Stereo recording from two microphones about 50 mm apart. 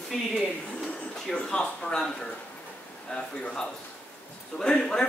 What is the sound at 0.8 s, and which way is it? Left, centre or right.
Speech, centre.